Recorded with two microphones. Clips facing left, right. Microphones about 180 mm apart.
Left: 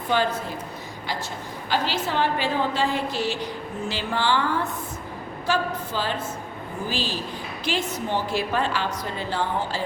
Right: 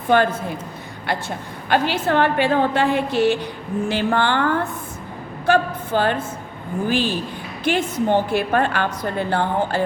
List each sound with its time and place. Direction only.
0.1 s a woman's voice: 55° right (ahead or behind)
1.7 s a woman's voice: 60° right (ahead or behind)